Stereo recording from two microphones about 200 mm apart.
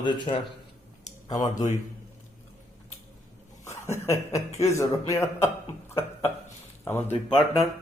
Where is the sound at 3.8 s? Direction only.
15° left (ahead or behind).